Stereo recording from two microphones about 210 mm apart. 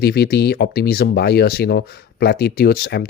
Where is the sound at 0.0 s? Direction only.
50° left (ahead or behind).